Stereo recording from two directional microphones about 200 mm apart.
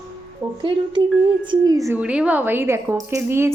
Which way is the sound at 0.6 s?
25° right (ahead or behind).